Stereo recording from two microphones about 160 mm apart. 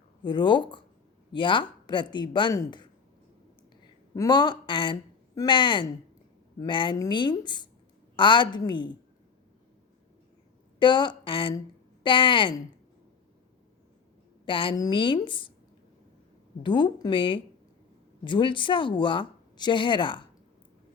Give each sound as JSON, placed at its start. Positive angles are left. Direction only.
{"t": 0.2, "sound": "speech", "side_deg": 30}
{"t": 4.1, "sound": "speech", "side_deg": 25}
{"t": 10.8, "sound": "speech", "side_deg": 30}
{"t": 14.4, "sound": "speech", "side_deg": 30}
{"t": 16.6, "sound": "speech", "side_deg": 30}